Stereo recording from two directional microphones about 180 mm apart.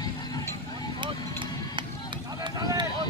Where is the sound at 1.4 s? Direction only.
25° right (ahead or behind).